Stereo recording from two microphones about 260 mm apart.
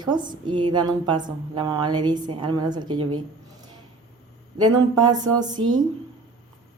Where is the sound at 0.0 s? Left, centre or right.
Centre.